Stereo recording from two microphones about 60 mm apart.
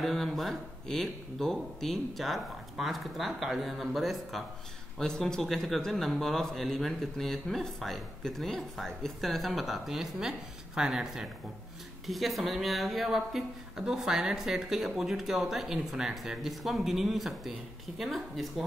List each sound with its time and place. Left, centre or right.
0.0 s speech: centre